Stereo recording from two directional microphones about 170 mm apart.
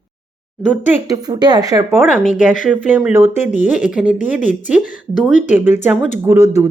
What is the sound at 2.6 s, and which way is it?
Speech, 10° right (ahead or behind).